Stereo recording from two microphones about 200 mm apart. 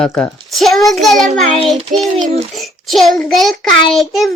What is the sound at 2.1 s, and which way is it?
Speech, 35° right (ahead or behind).